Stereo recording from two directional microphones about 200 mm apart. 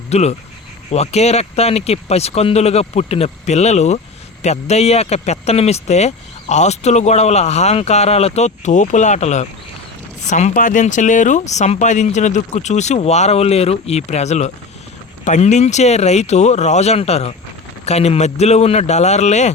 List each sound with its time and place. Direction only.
0.1 s speech: 35° left (ahead or behind)